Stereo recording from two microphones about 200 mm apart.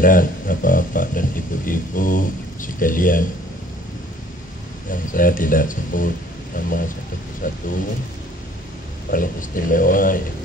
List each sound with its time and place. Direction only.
0.0 s speech: 45° left (ahead or behind)
4.9 s speech: 45° left (ahead or behind)
9.1 s speech: 45° left (ahead or behind)